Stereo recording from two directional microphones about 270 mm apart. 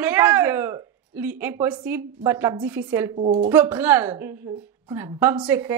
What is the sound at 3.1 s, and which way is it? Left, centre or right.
Speech, right.